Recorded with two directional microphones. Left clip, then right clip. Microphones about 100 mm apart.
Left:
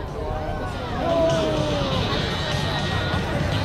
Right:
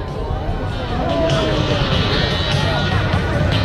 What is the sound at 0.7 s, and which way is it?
Music, 25° right (ahead or behind).